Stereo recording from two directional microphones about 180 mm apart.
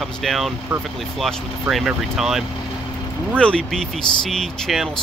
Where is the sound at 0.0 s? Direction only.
Centre (ahead or behind).